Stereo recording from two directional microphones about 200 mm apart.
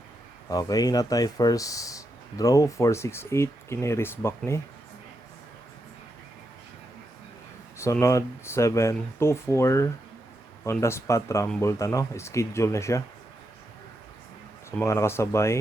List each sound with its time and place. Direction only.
0.4 s speech: 20° left (ahead or behind)
7.8 s speech: 15° left (ahead or behind)
14.8 s speech: 15° left (ahead or behind)